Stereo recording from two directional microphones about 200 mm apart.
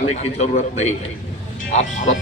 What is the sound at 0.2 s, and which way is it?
A man's voice, 35° left (ahead or behind).